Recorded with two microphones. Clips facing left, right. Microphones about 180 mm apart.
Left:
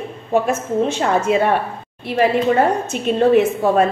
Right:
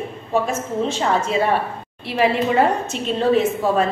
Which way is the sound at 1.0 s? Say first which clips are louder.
Left 2 dB; 60° left (ahead or behind).